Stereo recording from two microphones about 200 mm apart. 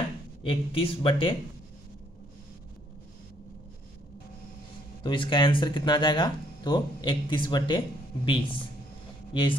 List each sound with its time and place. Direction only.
0.4 s speech: 25° left (ahead or behind)
5.0 s speech: 25° left (ahead or behind)